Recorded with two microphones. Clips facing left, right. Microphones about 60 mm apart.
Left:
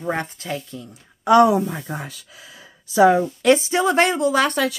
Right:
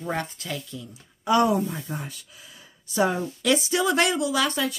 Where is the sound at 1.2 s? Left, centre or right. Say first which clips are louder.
Left 7 dB; left.